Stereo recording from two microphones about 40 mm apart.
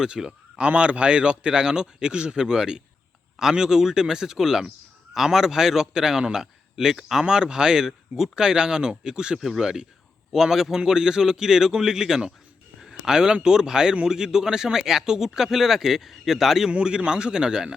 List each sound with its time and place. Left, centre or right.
0.0 s a man's voice: centre
16.8 s speech: right